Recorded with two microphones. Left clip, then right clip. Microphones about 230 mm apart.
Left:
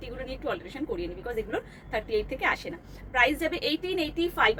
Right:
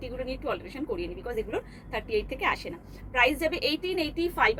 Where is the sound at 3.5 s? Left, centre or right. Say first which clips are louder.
Right 1 dB; left.